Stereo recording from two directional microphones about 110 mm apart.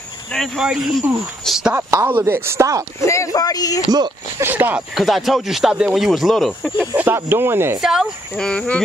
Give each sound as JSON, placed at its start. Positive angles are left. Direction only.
{"t": 0.3, "sound": "speech", "side_deg": 0}
{"t": 1.8, "sound": "speech", "side_deg": -25}
{"t": 3.0, "sound": "speech", "side_deg": 25}
{"t": 4.4, "sound": "speech", "side_deg": -20}
{"t": 4.9, "sound": "speech", "side_deg": 0}
{"t": 7.0, "sound": "speech", "side_deg": -20}
{"t": 7.8, "sound": "speech", "side_deg": -5}
{"t": 8.4, "sound": "speech", "side_deg": 10}